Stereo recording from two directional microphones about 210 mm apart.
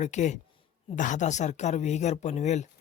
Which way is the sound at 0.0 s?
35° left (ahead or behind).